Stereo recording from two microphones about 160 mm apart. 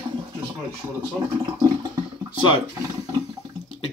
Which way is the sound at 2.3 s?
30° left (ahead or behind).